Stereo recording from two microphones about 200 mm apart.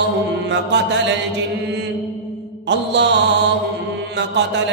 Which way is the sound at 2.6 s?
60° right (ahead or behind).